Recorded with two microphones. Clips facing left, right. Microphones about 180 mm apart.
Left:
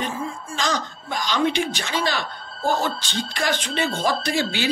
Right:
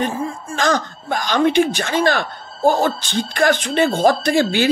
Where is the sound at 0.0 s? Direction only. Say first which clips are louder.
Right 6 dB; 50° right (ahead or behind).